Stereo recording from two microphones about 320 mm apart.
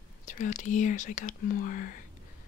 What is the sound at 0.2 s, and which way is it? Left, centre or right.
Speech, left.